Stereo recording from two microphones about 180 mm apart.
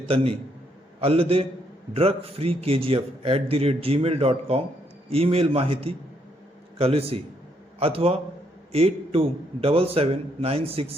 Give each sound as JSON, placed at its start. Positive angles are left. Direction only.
{"t": 1.0, "sound": "a man's voice", "side_deg": -30}